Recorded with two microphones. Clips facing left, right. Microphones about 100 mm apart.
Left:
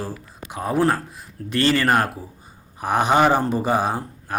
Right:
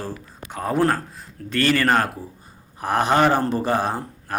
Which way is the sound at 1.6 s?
25° left (ahead or behind).